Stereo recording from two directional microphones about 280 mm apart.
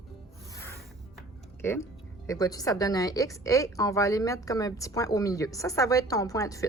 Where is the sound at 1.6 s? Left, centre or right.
Centre.